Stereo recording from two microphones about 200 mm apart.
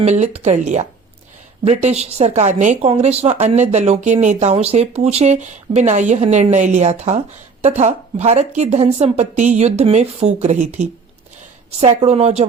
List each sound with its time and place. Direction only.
0.0 s speech: 35° right (ahead or behind)